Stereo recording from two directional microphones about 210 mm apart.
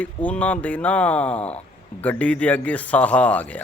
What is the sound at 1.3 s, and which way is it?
Speech, 30° left (ahead or behind).